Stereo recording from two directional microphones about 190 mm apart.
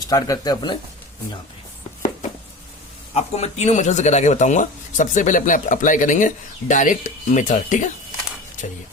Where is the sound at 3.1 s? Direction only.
35° left (ahead or behind).